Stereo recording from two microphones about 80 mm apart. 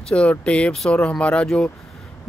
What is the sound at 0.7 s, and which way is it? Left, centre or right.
Speech, centre.